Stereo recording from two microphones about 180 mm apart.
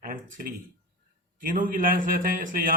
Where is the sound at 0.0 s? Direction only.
50° right (ahead or behind).